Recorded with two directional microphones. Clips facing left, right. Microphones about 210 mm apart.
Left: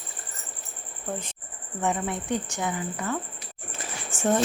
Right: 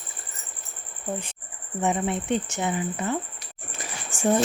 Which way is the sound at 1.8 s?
20° right (ahead or behind).